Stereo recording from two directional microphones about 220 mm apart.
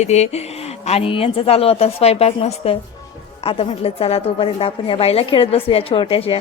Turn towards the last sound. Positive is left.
turn(degrees=25)  # may be behind; listen again after turning